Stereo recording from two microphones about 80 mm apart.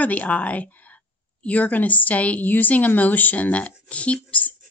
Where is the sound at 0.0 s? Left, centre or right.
Centre.